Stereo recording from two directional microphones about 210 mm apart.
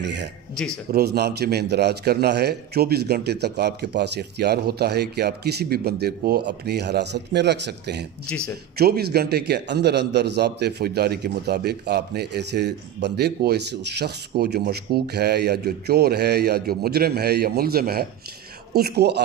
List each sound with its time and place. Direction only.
0.0 s a man's voice: 55° right (ahead or behind)